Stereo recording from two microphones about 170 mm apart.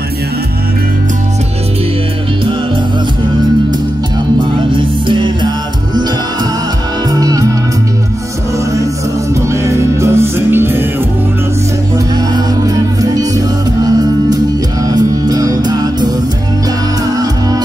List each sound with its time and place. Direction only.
4.7 s music: 30° right (ahead or behind)
7.1 s music: 20° right (ahead or behind)
9.5 s music: 15° right (ahead or behind)
12.6 s music: 20° right (ahead or behind)